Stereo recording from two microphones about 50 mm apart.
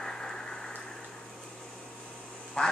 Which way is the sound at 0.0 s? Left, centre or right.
Centre.